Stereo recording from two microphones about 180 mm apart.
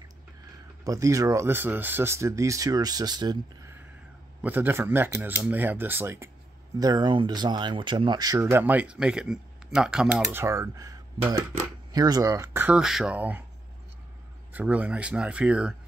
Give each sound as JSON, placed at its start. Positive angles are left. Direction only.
{"t": 0.8, "sound": "speech", "side_deg": -20}
{"t": 14.5, "sound": "speech", "side_deg": -10}